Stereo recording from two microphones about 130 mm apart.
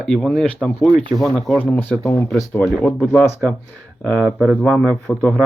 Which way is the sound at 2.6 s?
5° right (ahead or behind).